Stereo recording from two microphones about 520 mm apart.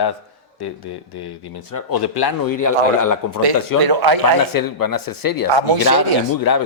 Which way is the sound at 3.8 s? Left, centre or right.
Right.